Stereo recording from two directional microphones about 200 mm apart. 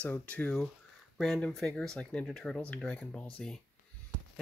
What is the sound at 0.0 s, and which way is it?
Speech, 5° left (ahead or behind).